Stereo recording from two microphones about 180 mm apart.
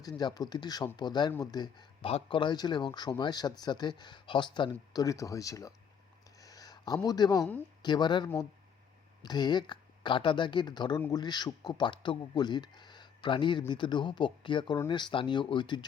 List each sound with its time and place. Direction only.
0.2 s speech: 25° left (ahead or behind)
6.4 s a sound: 20° left (ahead or behind)
7.8 s speech: 25° left (ahead or behind)